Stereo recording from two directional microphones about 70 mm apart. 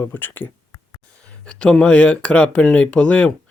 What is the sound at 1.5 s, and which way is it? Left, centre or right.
Speech, centre.